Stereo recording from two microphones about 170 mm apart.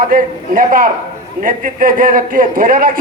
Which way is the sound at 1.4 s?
55° right (ahead or behind).